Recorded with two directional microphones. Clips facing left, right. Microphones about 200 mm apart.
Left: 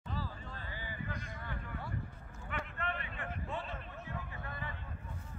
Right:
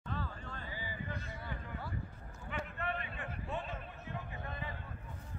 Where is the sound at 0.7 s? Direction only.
10° right (ahead or behind).